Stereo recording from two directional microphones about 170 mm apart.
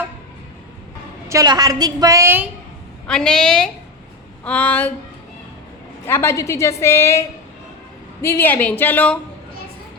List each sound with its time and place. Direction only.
1.3 s a woman's voice: 20° right (ahead or behind)
3.1 s a woman's voice: 5° left (ahead or behind)
6.1 s a woman's voice: 15° left (ahead or behind)